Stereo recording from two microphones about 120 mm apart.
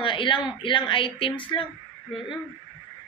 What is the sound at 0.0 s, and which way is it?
A woman's voice, 45° left (ahead or behind).